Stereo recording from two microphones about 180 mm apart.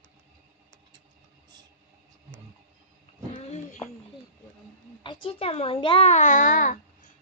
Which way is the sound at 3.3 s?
40° left (ahead or behind).